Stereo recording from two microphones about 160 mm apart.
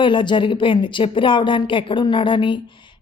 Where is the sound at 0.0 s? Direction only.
30° left (ahead or behind).